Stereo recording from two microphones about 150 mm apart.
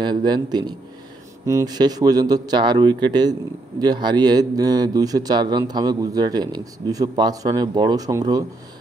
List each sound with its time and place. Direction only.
0.0 s a man's voice: 30° right (ahead or behind)